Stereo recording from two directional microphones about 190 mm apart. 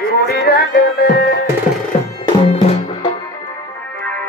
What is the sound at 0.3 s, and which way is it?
Music, 55° left (ahead or behind).